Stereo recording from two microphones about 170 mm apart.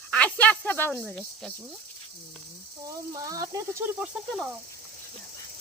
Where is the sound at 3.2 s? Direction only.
20° right (ahead or behind).